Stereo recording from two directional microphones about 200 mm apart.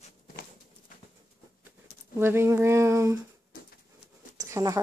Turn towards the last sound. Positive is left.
turn(degrees=-15)  # may be behind; listen again after turning